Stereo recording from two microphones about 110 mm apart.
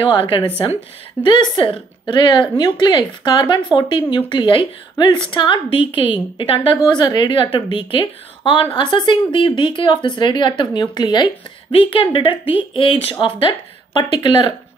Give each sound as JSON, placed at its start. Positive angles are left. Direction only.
{"t": 0.0, "sound": "speech", "side_deg": 50}
{"t": 6.9, "sound": "speech", "side_deg": 40}
{"t": 11.7, "sound": "speech", "side_deg": 50}